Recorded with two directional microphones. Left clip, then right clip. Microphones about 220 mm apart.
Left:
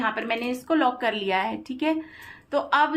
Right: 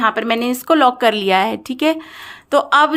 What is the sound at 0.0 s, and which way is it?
A woman's voice, 55° right (ahead or behind).